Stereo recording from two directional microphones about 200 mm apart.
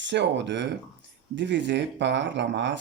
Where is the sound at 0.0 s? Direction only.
60° right (ahead or behind).